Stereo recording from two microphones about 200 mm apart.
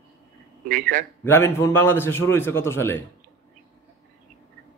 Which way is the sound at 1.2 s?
10° left (ahead or behind).